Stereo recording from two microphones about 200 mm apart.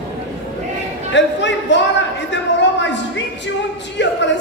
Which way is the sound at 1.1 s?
65° left (ahead or behind).